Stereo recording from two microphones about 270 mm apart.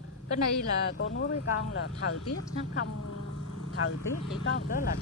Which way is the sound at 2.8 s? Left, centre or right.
Left.